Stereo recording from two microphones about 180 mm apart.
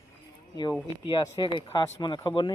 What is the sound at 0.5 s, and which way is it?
Speech, 20° left (ahead or behind).